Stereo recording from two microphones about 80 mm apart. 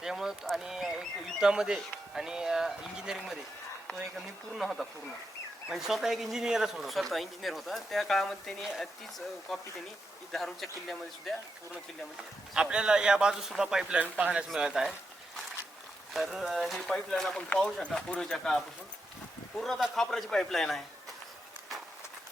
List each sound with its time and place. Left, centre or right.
0.0 s speech: centre
12.5 s a man's voice: centre
14.5 s speech: centre
16.1 s speech: centre